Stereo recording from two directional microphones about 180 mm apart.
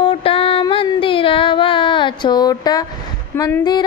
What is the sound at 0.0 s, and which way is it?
Child singing, 30° left (ahead or behind).